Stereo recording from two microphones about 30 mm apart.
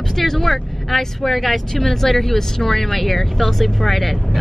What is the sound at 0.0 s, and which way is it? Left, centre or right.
Speech, centre.